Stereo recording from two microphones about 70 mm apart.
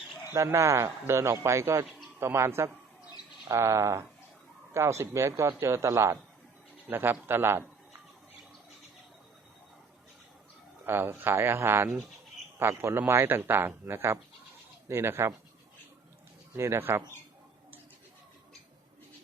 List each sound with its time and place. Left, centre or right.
0.3 s speech: right
6.9 s speech: right
10.8 s a man's voice: right
16.6 s speech: right